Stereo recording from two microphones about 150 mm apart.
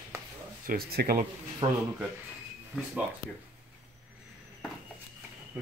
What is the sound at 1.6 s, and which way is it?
Speech, 30° right (ahead or behind).